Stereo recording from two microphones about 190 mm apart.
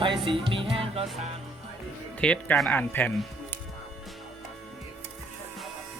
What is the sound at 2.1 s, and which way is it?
Speech, 5° left (ahead or behind).